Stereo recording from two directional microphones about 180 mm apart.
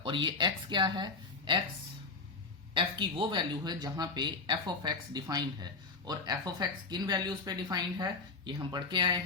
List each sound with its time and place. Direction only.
0.0 s speech: 25° right (ahead or behind)
2.7 s speech: 25° right (ahead or behind)